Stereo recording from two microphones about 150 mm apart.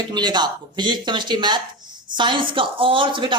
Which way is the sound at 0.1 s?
30° right (ahead or behind).